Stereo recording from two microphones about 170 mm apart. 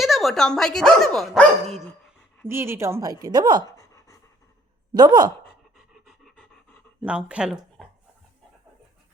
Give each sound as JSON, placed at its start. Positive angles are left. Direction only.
{"t": 0.0, "sound": "speech", "side_deg": 0}
{"t": 2.5, "sound": "a woman's voice", "side_deg": -15}
{"t": 3.6, "sound": "pant", "side_deg": 20}
{"t": 4.9, "sound": "a woman's voice", "side_deg": -25}
{"t": 5.7, "sound": "pant", "side_deg": 0}
{"t": 7.0, "sound": "speech", "side_deg": -5}